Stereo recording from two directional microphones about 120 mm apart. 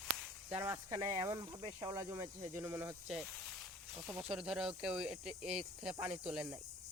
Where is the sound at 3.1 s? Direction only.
5° right (ahead or behind).